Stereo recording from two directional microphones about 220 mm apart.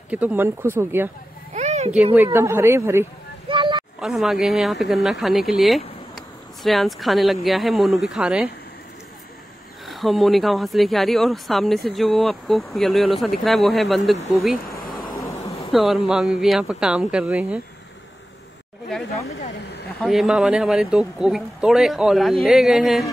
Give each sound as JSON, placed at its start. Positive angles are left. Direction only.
{"t": 0.1, "sound": "speech", "side_deg": -5}
{"t": 1.5, "sound": "a sound", "side_deg": -30}
{"t": 2.1, "sound": "speech", "side_deg": -10}
{"t": 3.4, "sound": "a sound", "side_deg": -20}
{"t": 4.0, "sound": "speech", "side_deg": 0}
{"t": 9.8, "sound": "speech", "side_deg": 0}
{"t": 14.7, "sound": "a sound", "side_deg": 15}
{"t": 15.7, "sound": "speech", "side_deg": 0}
{"t": 20.0, "sound": "speech", "side_deg": 0}